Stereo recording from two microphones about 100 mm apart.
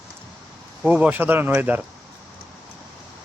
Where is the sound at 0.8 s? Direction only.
15° right (ahead or behind).